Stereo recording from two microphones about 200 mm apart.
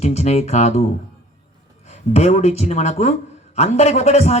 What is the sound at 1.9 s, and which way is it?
Speech, 35° left (ahead or behind).